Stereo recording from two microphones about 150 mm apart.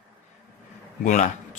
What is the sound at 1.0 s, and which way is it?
Speech, 55° left (ahead or behind).